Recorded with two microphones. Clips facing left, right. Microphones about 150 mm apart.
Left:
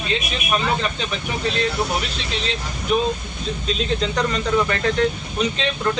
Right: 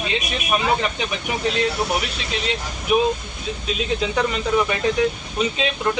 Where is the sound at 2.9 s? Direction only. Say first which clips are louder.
Right 2 dB; 10° right (ahead or behind).